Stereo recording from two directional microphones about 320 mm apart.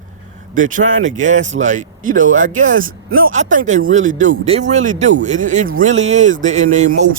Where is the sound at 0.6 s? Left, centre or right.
Right.